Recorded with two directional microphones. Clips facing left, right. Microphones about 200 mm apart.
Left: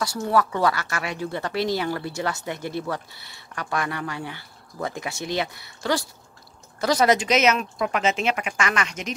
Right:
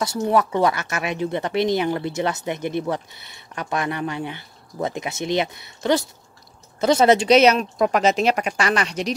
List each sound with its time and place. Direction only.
0.0 s speech: 20° right (ahead or behind)